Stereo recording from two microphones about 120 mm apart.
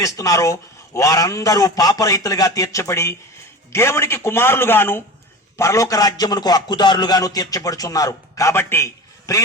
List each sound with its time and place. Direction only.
0.0 s a man's voice: 30° left (ahead or behind)